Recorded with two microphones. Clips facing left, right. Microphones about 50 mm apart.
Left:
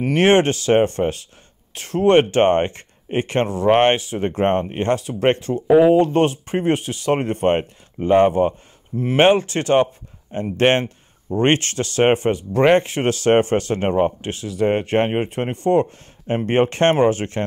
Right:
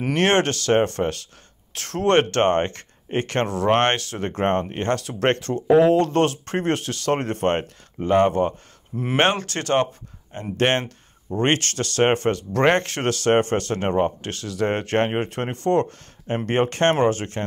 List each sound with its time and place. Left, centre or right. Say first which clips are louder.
0.1 s speech: left 4 dB; centre
13.1 s speech: left 3 dB; left
16.4 s speech: left 3 dB; left